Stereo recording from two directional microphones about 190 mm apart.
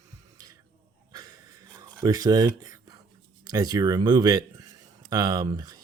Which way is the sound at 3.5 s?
20° right (ahead or behind).